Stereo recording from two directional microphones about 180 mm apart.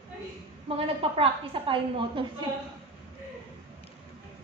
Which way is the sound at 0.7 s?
30° right (ahead or behind).